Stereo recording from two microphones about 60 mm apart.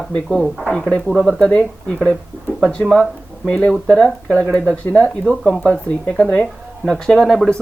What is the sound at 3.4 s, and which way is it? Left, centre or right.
Speech, centre.